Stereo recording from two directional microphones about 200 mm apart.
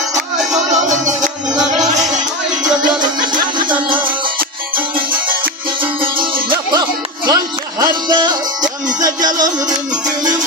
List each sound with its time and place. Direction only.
0.7 s music: 40° right (ahead or behind)
6.5 s music: 20° right (ahead or behind)